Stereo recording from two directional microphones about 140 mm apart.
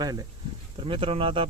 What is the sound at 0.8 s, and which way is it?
Speech, 40° right (ahead or behind).